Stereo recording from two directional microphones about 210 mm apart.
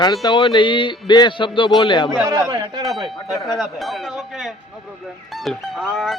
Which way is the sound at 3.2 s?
Centre (ahead or behind).